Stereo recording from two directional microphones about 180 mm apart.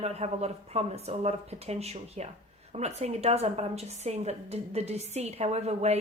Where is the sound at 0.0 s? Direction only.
35° right (ahead or behind).